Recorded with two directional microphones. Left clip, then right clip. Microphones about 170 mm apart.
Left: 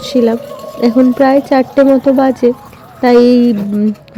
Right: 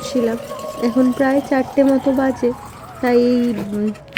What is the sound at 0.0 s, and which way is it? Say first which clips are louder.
Speech: left 7 dB; 25° left (ahead or behind).